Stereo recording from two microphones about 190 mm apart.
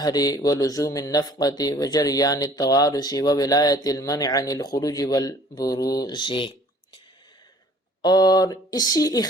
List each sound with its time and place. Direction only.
0.0 s speech: 20° left (ahead or behind)
8.0 s speech: 20° left (ahead or behind)